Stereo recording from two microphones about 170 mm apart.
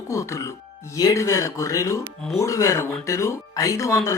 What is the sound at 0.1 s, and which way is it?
Speech, 20° left (ahead or behind).